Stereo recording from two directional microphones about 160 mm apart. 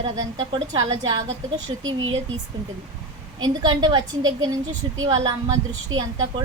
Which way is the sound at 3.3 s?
30° right (ahead or behind).